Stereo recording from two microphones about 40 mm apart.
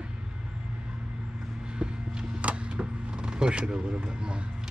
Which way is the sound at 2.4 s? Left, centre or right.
Right.